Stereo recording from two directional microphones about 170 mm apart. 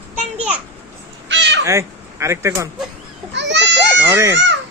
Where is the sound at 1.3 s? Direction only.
90° right.